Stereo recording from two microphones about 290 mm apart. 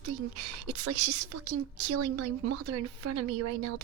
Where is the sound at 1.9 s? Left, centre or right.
Right.